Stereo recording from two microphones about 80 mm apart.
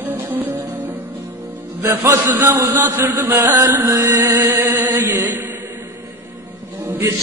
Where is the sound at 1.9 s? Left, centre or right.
Right.